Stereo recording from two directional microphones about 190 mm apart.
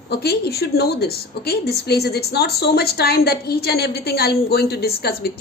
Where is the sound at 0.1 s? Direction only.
60° left (ahead or behind).